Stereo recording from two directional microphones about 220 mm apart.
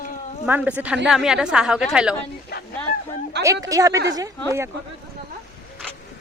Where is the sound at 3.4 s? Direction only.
15° right (ahead or behind).